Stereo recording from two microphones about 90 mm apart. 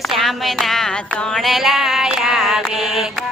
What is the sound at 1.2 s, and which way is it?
Mantra, 5° left (ahead or behind).